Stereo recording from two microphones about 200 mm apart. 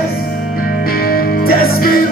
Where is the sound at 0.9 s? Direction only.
45° left (ahead or behind).